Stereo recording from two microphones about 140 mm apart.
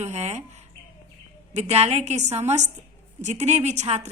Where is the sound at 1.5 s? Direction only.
50° right (ahead or behind).